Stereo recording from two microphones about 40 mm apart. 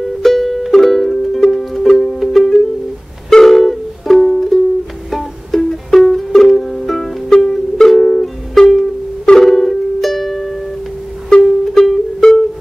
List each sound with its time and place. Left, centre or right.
0.2 s music: centre
7.2 s music: centre
7.5 s music: centre
9.2 s music: centre
9.5 s music: centre
11.3 s music: left